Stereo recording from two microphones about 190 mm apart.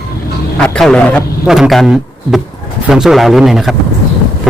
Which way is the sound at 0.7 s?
5° left (ahead or behind).